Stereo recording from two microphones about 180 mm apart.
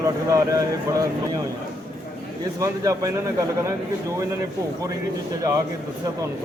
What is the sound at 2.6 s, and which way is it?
Speech, 20° right (ahead or behind).